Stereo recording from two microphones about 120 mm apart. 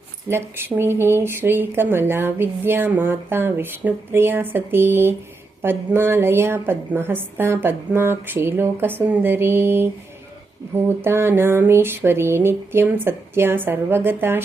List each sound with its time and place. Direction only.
0.3 s speech: 20° right (ahead or behind)